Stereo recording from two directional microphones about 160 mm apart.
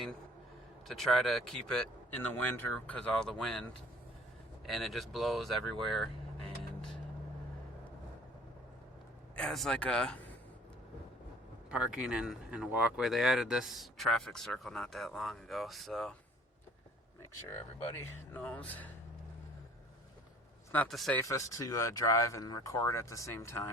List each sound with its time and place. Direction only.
0.9 s speech: centre (ahead or behind)
9.3 s speech: 5° left (ahead or behind)
11.7 s speech: 5° right (ahead or behind)
17.9 s speech: 15° left (ahead or behind)
20.7 s speech: centre (ahead or behind)
21.2 s speech: 20° left (ahead or behind)